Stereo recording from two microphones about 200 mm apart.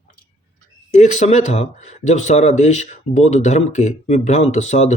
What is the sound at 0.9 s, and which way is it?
Speech, 40° left (ahead or behind).